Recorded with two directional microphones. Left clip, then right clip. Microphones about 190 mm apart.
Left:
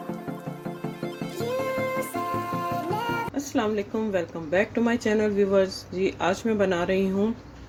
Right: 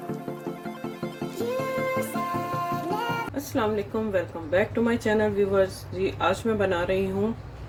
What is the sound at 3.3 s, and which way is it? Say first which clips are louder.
A woman's voice: even; 20° left (ahead or behind).